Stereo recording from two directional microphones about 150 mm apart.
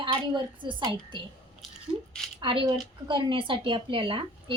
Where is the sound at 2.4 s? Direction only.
35° right (ahead or behind).